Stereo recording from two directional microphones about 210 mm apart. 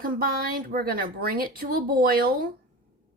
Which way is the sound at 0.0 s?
45° right (ahead or behind).